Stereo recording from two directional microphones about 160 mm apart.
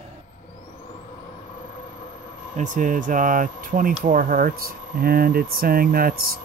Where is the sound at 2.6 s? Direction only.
55° right (ahead or behind).